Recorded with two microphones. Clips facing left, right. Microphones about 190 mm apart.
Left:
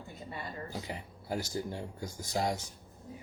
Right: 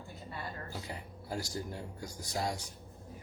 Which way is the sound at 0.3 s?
20° left (ahead or behind).